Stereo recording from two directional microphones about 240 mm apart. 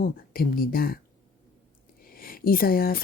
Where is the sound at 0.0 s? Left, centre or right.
Left.